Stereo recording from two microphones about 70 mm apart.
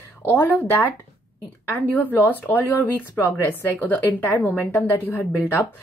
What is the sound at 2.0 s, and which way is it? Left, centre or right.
Speech, left.